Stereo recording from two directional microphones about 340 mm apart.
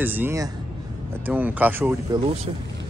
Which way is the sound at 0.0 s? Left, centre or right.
Centre.